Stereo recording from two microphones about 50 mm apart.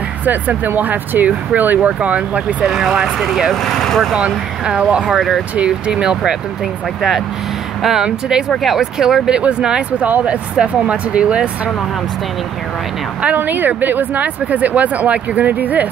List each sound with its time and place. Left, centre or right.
0.2 s speech: right
2.6 s speech: centre
3.6 s speech: centre
4.2 s speech: right
5.1 s speech: centre
5.9 s speech: centre
7.8 s speech: centre
9.4 s speech: right
13.4 s speech: right